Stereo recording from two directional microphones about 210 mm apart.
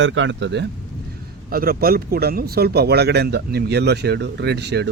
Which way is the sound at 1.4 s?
45° right (ahead or behind).